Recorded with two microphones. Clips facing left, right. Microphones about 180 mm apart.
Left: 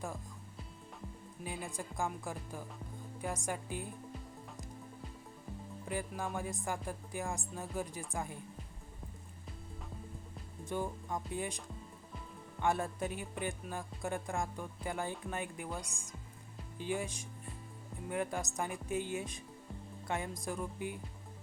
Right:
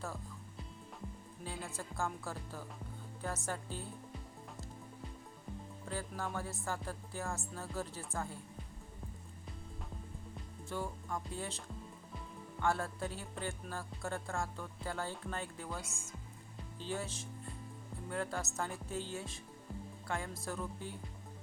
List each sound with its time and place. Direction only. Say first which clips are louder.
1.6 s speech: left 1 dB; 15° left (ahead or behind)
5.8 s speech: left 3 dB; 15° left (ahead or behind)
10.7 s speech: left 3 dB; 20° left (ahead or behind)